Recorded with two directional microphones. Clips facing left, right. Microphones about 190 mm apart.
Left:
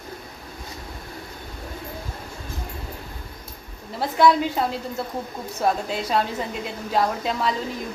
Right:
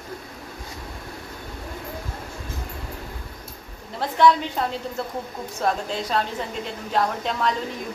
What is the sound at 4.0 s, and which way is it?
A woman's voice, 10° left (ahead or behind).